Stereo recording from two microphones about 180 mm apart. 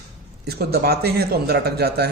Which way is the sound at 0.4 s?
60° right (ahead or behind).